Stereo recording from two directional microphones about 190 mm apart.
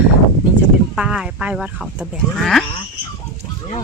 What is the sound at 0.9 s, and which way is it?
Speech, 5° right (ahead or behind).